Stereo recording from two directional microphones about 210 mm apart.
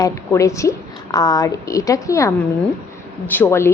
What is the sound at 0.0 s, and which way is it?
A woman's voice, 15° left (ahead or behind).